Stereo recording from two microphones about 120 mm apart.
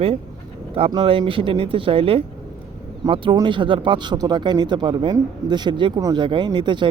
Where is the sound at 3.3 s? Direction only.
40° right (ahead or behind).